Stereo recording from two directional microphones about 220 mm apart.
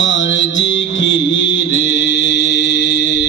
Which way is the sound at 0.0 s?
55° left (ahead or behind).